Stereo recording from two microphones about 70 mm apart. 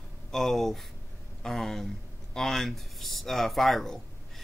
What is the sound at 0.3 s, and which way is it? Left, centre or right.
A man's voice, centre.